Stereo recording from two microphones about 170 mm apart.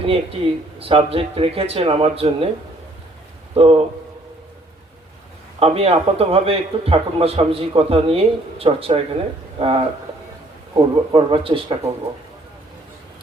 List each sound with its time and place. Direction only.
0.0 s a man's voice: 35° right (ahead or behind)
3.5 s speech: 35° right (ahead or behind)
5.5 s a man's voice: 35° right (ahead or behind)